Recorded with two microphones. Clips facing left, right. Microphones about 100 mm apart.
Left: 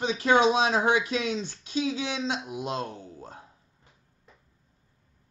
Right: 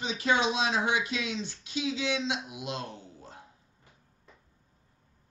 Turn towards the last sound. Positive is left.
turn(degrees=40)  # may be behind; listen again after turning